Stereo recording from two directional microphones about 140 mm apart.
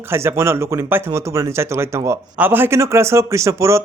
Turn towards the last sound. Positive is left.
turn(degrees=-20)  # may be behind; listen again after turning